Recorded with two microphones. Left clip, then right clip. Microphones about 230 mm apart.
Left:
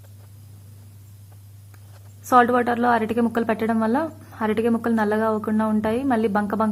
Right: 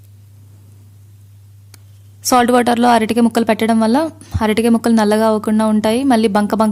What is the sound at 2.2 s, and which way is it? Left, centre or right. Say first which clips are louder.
A woman's voice: right 5 dB; right.